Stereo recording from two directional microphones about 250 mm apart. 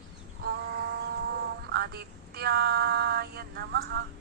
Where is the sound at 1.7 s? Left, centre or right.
Right.